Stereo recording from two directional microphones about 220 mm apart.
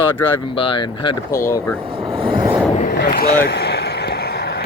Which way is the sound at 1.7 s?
25° right (ahead or behind).